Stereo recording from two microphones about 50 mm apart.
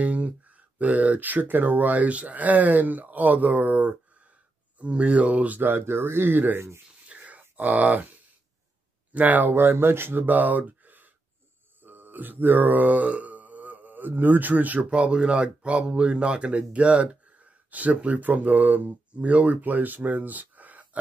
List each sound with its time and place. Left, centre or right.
0.0 s a sound: right
0.7 s speech: right
5.6 s speech: right
7.1 s a sound: right
9.1 s speech: right
9.6 s speech: right
11.8 s mantra: right